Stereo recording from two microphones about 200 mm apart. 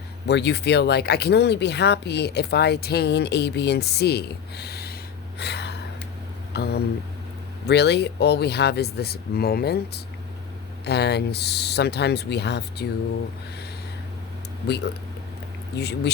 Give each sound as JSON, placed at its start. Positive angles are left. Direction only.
{"t": 0.3, "sound": "speech", "side_deg": 60}
{"t": 5.4, "sound": "a sound", "side_deg": 55}
{"t": 7.7, "sound": "speech", "side_deg": 55}
{"t": 15.7, "sound": "speech", "side_deg": 55}